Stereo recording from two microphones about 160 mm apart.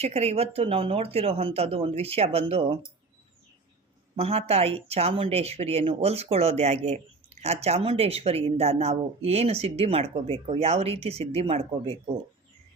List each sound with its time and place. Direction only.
0.0 s speech: 40° right (ahead or behind)
4.1 s speech: 40° right (ahead or behind)